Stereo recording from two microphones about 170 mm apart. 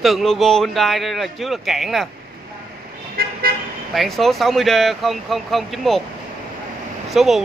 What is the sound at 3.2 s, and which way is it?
Vehicle, 65° right (ahead or behind).